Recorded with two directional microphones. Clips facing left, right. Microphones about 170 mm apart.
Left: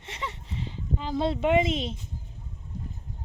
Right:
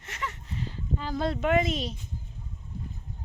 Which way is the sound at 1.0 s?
25° left (ahead or behind).